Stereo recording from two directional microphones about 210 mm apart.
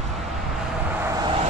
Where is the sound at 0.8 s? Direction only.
10° right (ahead or behind).